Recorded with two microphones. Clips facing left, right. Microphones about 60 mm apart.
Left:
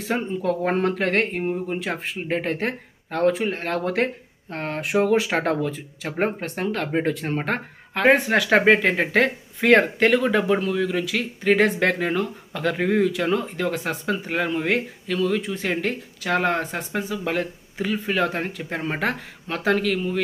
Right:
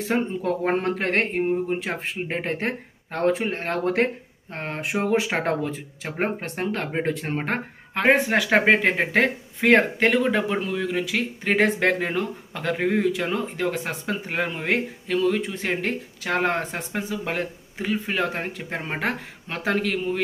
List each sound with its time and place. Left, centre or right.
0.1 s speech: right
4.5 s speech: centre